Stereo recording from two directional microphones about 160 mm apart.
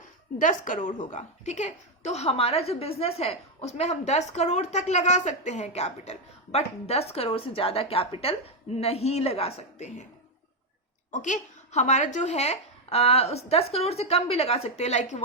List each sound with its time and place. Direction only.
0.3 s a woman's voice: 55° left (ahead or behind)
11.1 s speech: 50° left (ahead or behind)